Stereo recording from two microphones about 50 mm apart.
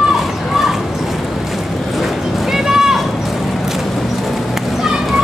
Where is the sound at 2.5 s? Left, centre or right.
Centre.